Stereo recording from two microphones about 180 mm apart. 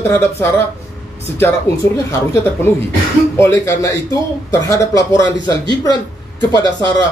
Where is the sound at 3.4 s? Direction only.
15° left (ahead or behind).